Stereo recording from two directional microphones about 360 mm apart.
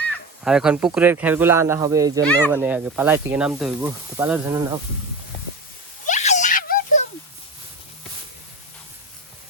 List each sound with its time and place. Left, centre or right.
0.4 s speech: centre
2.2 s speech: centre
6.1 s a sound: centre